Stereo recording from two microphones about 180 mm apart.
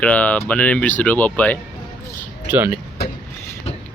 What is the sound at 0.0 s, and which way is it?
Speech, 10° left (ahead or behind).